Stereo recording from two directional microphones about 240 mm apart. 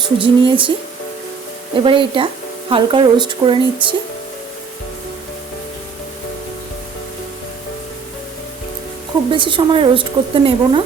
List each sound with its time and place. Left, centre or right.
0.2 s speech: right
1.8 s speech: right
9.3 s speech: centre